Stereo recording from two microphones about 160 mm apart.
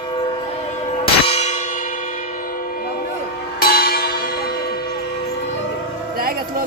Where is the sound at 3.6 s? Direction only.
70° left (ahead or behind).